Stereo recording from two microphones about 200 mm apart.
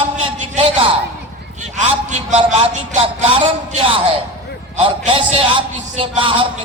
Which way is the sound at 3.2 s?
30° right (ahead or behind).